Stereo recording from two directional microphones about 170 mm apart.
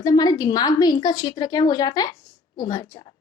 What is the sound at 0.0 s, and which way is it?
A woman's voice, 25° left (ahead or behind).